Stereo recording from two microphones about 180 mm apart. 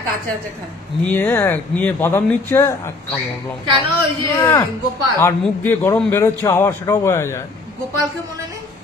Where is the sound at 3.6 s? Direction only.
25° right (ahead or behind).